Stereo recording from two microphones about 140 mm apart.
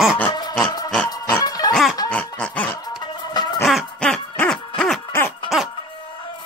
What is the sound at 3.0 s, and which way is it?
Music, 30° left (ahead or behind).